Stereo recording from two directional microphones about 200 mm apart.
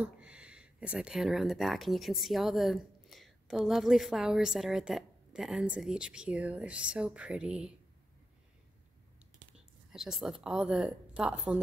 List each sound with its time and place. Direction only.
0.0 s speech: 5° right (ahead or behind)
9.9 s speech: centre (ahead or behind)